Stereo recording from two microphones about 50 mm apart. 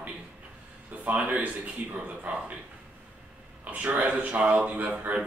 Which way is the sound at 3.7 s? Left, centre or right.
Right.